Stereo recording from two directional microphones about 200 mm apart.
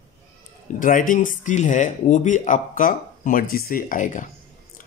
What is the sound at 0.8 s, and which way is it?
Speech, 40° left (ahead or behind).